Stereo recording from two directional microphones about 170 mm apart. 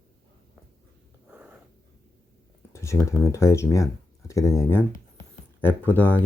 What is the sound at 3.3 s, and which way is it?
Speech, 15° left (ahead or behind).